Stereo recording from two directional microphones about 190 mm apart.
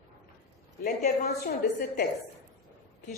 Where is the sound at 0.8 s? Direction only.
45° left (ahead or behind).